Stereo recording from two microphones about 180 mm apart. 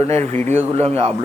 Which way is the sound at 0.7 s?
35° right (ahead or behind).